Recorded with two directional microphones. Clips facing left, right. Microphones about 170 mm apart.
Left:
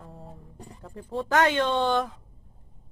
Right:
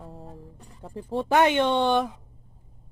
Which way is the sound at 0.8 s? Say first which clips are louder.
Right 3 dB; 25° right (ahead or behind).